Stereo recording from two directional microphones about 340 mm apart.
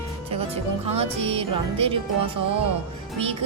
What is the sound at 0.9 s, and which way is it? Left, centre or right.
Speech, centre.